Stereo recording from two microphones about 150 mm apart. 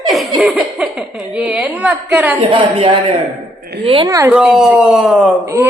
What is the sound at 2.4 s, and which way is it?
Speech, 35° right (ahead or behind).